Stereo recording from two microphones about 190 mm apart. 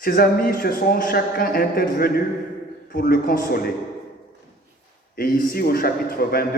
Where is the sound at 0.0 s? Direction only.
50° left (ahead or behind).